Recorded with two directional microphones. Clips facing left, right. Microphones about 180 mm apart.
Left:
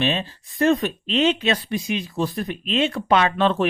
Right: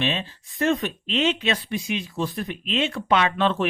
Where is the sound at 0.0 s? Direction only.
40° left (ahead or behind).